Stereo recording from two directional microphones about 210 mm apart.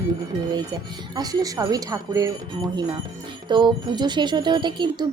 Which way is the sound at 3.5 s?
20° right (ahead or behind).